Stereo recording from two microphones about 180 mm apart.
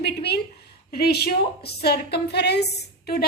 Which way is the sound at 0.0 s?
65° left (ahead or behind).